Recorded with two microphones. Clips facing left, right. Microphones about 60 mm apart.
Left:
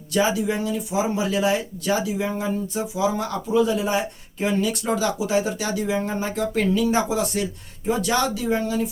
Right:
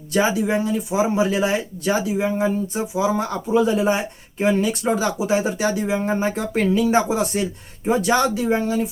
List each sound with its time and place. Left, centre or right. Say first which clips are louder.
0.1 s speech: right 2 dB; right